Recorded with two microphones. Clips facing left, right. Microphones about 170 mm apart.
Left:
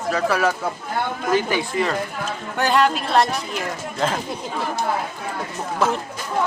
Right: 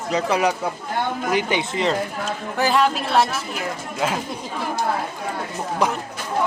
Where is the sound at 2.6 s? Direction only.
Centre (ahead or behind).